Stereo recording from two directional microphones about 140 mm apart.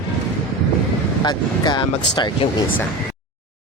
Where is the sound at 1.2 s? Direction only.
30° left (ahead or behind).